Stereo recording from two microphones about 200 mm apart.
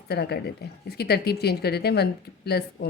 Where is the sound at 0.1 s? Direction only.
50° left (ahead or behind).